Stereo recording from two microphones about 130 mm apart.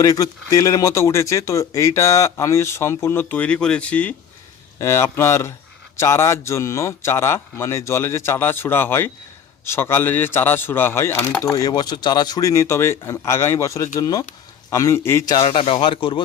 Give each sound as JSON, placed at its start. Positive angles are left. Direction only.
{"t": 0.0, "sound": "speech", "side_deg": 25}
{"t": 4.8, "sound": "speech", "side_deg": 20}
{"t": 15.4, "sound": "speech", "side_deg": 45}